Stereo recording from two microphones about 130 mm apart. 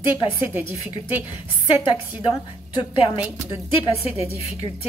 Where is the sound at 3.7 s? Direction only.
45° left (ahead or behind).